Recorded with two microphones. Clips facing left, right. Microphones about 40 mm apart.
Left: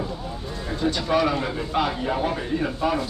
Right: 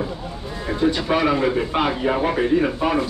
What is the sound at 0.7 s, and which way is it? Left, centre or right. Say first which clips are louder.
Speech: right 4 dB; right.